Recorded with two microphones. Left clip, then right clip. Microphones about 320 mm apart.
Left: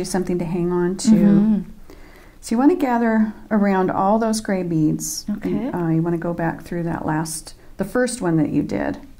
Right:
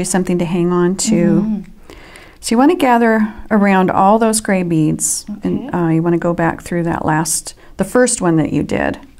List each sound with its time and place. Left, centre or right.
0.0 s speech: right
2.4 s speech: right
5.3 s speech: centre
5.7 s speech: right